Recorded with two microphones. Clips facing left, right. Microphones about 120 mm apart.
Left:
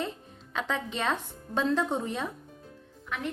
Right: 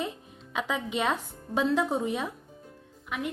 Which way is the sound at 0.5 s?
10° right (ahead or behind).